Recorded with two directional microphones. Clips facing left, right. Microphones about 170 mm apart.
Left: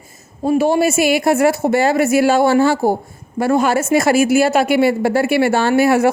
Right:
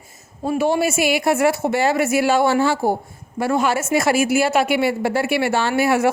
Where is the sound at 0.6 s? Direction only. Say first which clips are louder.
Left 2 dB; 40° left (ahead or behind).